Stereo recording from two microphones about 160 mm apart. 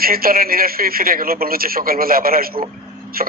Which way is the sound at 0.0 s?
65° right (ahead or behind).